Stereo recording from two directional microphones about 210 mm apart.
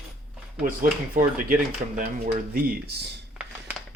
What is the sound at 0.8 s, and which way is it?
Speech, 40° right (ahead or behind).